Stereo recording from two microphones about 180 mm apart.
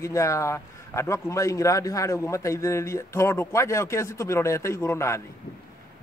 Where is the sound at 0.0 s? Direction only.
15° left (ahead or behind).